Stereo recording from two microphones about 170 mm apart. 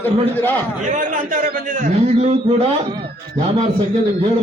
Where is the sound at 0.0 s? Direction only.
10° left (ahead or behind).